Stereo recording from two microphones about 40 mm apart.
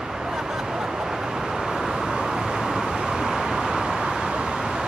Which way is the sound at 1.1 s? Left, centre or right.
Centre.